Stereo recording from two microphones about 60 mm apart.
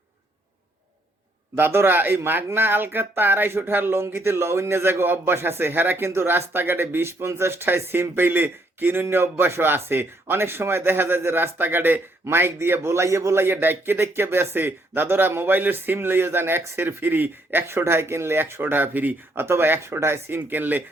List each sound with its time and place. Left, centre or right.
1.5 s a man's voice: right